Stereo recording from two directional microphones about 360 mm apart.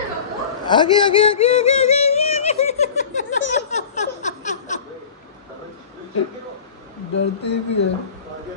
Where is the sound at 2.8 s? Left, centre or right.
Centre.